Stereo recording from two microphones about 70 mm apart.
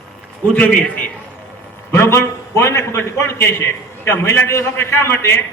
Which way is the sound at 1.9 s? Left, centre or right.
Left.